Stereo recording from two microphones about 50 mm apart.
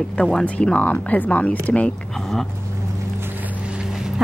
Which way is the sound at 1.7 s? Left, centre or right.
Left.